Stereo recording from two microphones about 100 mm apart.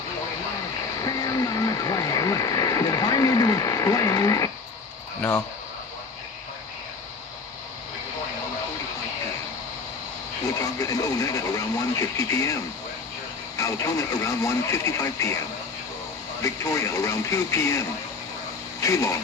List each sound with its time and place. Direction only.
1.0 s a sound: 35° left (ahead or behind)
10.8 s speech: 35° left (ahead or behind)
13.6 s speech: 30° left (ahead or behind)
16.4 s speech: 30° left (ahead or behind)